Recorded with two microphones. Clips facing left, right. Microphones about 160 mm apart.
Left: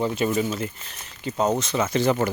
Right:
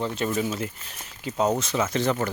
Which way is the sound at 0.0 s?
10° left (ahead or behind).